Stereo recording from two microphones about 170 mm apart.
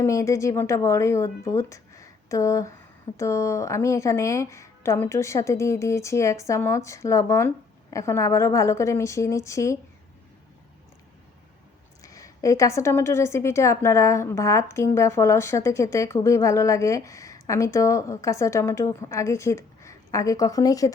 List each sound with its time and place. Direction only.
0.0 s a woman's voice: 20° left (ahead or behind)
12.0 s a woman's voice: 20° left (ahead or behind)